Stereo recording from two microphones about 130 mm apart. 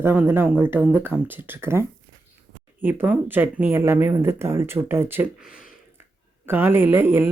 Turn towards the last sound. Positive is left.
turn(degrees=-15)  # may be behind; listen again after turning